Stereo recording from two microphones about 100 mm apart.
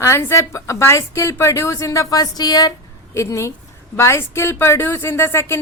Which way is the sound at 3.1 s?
30° left (ahead or behind).